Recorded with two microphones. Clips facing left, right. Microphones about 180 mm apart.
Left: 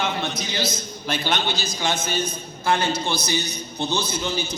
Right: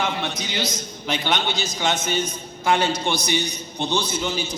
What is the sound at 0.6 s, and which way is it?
A man's voice, 15° right (ahead or behind).